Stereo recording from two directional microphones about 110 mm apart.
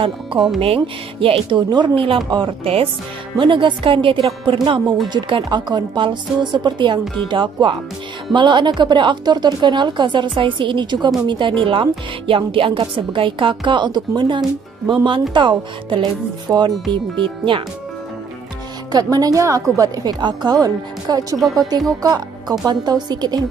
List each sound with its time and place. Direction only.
0.6 s speech: 55° right (ahead or behind)
3.3 s a woman's voice: 50° right (ahead or behind)
18.9 s speech: 35° right (ahead or behind)